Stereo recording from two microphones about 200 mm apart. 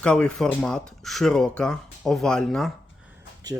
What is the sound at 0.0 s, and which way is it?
Speech, 5° left (ahead or behind).